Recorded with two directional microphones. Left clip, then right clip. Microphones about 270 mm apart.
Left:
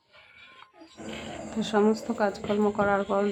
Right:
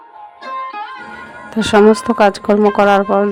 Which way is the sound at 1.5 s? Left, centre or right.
Right.